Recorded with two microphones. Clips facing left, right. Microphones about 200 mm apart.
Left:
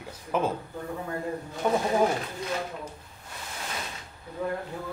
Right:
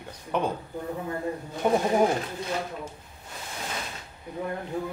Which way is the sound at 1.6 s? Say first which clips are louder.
Right 2 dB; 15° right (ahead or behind).